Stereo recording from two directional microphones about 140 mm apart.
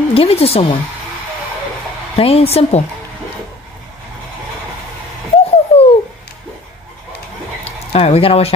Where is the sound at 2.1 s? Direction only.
45° left (ahead or behind).